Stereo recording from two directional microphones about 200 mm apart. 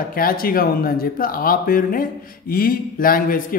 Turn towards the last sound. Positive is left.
turn(degrees=45)  # may be behind; listen again after turning